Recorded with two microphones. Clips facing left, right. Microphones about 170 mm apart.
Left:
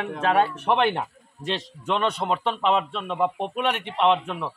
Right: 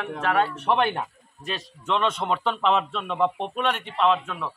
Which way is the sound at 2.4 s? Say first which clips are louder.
Right 1 dB; centre (ahead or behind).